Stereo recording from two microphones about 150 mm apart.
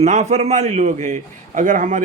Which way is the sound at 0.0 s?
50° right (ahead or behind).